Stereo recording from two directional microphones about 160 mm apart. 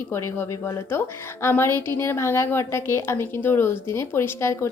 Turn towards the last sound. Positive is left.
turn(degrees=15)  # may be behind; listen again after turning